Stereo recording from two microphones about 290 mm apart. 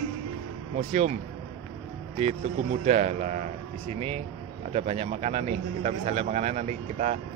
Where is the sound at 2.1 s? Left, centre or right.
Right.